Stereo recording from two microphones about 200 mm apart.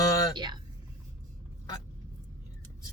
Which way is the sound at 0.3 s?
20° right (ahead or behind).